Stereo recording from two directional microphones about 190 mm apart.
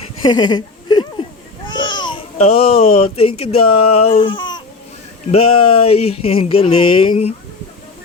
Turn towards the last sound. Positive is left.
turn(degrees=30)  # may be behind; listen again after turning